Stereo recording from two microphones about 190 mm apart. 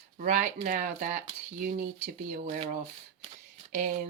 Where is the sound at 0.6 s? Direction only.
45° right (ahead or behind).